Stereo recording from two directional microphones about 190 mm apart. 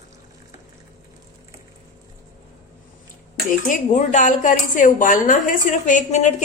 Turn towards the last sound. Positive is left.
turn(degrees=40)  # may be behind; listen again after turning